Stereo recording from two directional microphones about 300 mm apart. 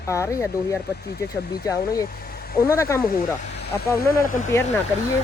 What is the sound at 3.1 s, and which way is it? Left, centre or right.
Speech, left.